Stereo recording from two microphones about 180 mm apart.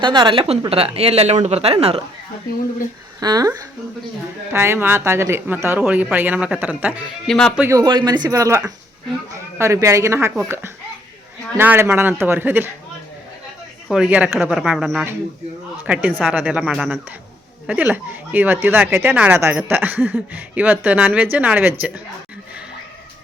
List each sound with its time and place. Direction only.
0.0 s speech: 25° right (ahead or behind)
3.2 s speech: 20° right (ahead or behind)
7.3 s speech: 5° left (ahead or behind)
7.5 s speech: 10° right (ahead or behind)
7.8 s speech: 25° right (ahead or behind)
13.8 s speech: 5° right (ahead or behind)